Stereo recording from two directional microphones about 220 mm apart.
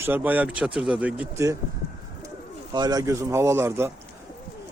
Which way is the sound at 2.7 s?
20° right (ahead or behind).